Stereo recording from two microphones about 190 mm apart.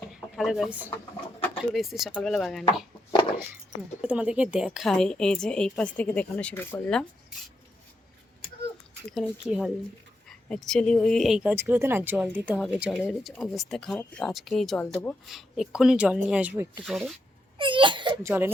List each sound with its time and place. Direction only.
0.3 s speech: centre (ahead or behind)
4.0 s speech: 5° right (ahead or behind)
9.1 s speech: centre (ahead or behind)
17.6 s a sound: 25° right (ahead or behind)
18.2 s speech: 10° right (ahead or behind)